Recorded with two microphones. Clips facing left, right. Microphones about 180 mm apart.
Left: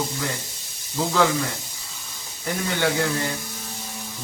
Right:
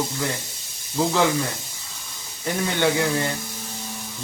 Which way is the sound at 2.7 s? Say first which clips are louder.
Right 2 dB; 20° right (ahead or behind).